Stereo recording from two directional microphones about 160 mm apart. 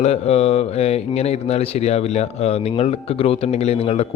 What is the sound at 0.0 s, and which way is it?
Speech, 40° left (ahead or behind).